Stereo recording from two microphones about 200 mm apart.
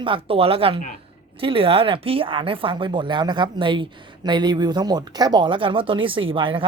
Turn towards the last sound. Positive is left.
turn(degrees=-25)  # may be behind; listen again after turning